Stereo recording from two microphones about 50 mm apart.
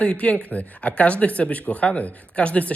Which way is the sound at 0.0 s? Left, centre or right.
Left.